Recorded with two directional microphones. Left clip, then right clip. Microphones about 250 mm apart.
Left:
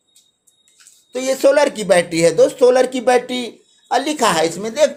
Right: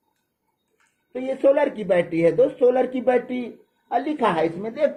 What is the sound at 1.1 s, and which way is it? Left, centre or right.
Speech, left.